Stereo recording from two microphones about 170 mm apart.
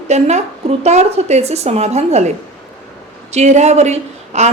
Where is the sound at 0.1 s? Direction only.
40° right (ahead or behind).